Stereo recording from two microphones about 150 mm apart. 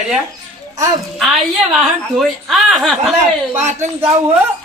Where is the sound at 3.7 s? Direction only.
50° right (ahead or behind).